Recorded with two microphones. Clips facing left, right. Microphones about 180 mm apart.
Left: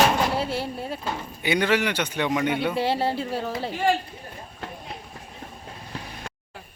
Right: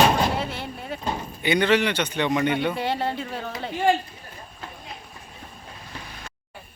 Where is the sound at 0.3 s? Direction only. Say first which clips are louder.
Left 3 dB; 35° left (ahead or behind).